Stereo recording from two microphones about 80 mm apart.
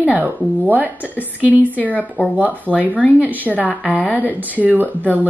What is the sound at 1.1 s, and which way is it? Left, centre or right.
Speech, left.